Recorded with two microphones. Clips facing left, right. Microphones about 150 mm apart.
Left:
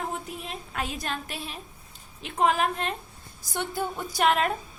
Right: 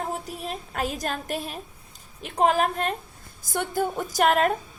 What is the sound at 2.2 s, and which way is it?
A woman's voice, 40° right (ahead or behind).